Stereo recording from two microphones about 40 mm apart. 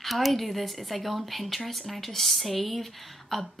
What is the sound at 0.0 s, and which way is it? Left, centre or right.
Speech, centre.